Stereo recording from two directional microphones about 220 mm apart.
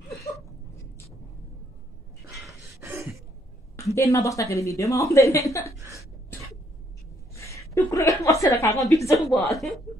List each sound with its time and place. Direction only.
2.8 s a sound: 10° right (ahead or behind)
3.7 s speech: 15° left (ahead or behind)
7.3 s a woman's voice: 15° left (ahead or behind)
9.2 s speech: centre (ahead or behind)